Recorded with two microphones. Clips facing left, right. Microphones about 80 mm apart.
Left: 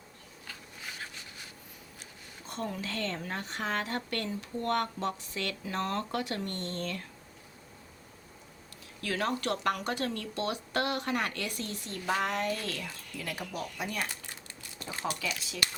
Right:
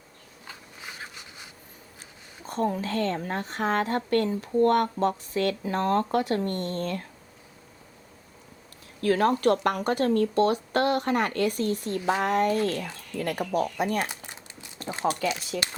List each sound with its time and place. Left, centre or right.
0.4 s writing: centre
2.5 s a woman's voice: right
9.0 s a woman's voice: right
15.0 s speech: right